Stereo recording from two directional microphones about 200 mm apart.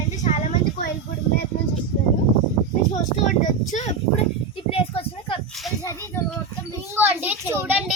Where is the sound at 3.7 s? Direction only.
40° left (ahead or behind).